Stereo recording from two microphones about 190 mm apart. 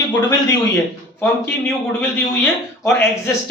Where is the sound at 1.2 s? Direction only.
10° left (ahead or behind).